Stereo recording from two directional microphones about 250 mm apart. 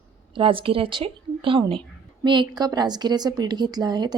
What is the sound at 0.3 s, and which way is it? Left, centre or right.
A woman's voice, right.